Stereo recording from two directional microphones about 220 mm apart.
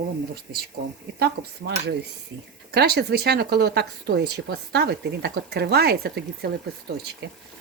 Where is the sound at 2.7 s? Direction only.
45° right (ahead or behind).